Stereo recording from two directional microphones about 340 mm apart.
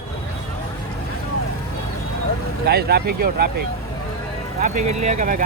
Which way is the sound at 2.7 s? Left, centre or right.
Right.